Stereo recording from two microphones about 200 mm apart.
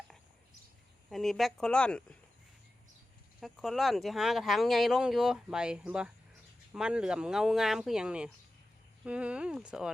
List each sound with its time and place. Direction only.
1.1 s speech: centre (ahead or behind)
3.4 s speech: centre (ahead or behind)